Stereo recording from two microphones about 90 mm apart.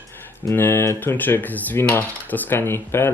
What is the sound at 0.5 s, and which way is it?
Speech, 25° left (ahead or behind).